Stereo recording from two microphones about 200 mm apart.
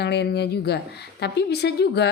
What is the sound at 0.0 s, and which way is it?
A woman's voice, 55° left (ahead or behind).